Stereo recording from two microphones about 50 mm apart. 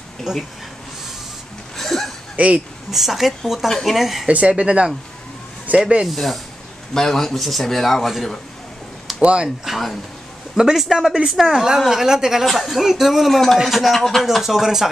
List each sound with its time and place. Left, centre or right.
0.2 s a man's voice: centre
1.8 s a sound: centre
2.3 s speech: right
2.9 s a man's voice: centre
4.3 s speech: right
6.0 s a man's voice: centre
9.2 s speech: right
9.7 s a man's voice: centre